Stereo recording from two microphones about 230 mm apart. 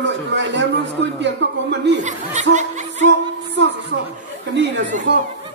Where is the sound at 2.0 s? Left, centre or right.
Right.